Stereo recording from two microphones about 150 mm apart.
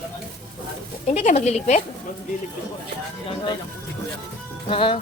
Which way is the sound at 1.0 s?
50° left (ahead or behind).